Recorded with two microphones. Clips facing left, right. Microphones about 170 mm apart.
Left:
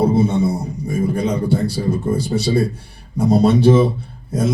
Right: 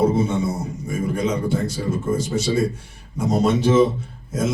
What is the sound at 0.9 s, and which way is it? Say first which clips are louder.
Speech: left 3 dB; 35° left (ahead or behind).